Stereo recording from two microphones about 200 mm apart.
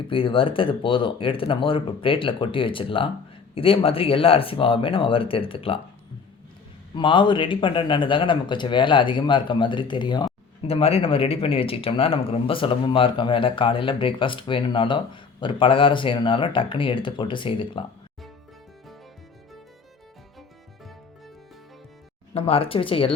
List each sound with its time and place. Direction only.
0.1 s speech: 25° left (ahead or behind)
6.9 s speech: 25° left (ahead or behind)
22.4 s speech: 30° left (ahead or behind)